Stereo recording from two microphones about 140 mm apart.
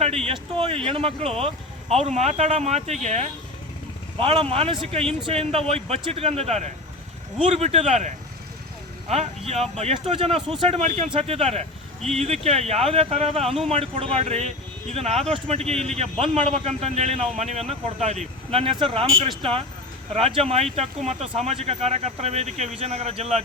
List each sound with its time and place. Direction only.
0.3 s speech: 45° right (ahead or behind)
4.2 s speech: 40° right (ahead or behind)
11.1 s speech: 45° right (ahead or behind)